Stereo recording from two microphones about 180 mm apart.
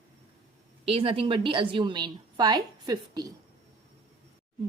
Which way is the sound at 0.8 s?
30° right (ahead or behind).